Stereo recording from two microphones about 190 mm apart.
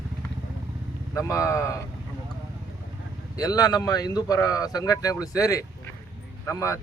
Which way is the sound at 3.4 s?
20° left (ahead or behind).